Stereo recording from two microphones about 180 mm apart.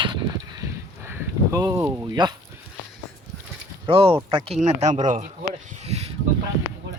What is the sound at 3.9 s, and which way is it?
Speech, 30° right (ahead or behind).